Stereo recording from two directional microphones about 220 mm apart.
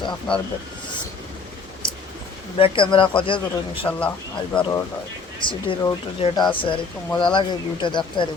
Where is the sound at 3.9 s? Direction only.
10° left (ahead or behind).